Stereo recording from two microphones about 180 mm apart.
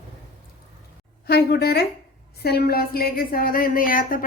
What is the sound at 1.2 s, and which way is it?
A woman's voice, 65° left (ahead or behind).